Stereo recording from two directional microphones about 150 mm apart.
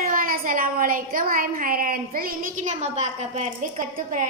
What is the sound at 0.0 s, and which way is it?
A woman's voice, 70° right (ahead or behind).